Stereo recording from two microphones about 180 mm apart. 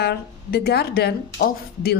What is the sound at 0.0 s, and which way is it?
A woman's voice, 60° left (ahead or behind).